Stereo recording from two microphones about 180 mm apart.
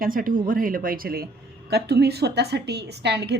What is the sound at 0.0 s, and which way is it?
A woman's voice, 50° right (ahead or behind).